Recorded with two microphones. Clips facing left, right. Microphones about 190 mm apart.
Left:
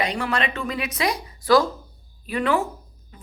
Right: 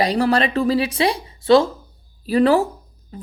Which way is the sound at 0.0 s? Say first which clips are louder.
Right 7 dB; 35° right (ahead or behind).